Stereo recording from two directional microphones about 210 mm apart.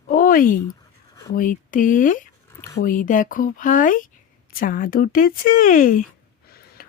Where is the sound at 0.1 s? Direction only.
40° left (ahead or behind).